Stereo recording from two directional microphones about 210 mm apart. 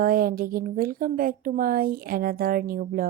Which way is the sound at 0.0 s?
45° right (ahead or behind).